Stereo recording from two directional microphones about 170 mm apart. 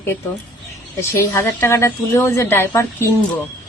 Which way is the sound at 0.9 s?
15° left (ahead or behind).